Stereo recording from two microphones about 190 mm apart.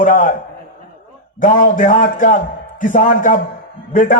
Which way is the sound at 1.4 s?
45° left (ahead or behind).